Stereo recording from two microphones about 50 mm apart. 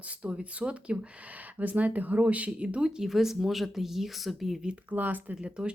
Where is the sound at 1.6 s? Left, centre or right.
Right; by 3.0 s centre.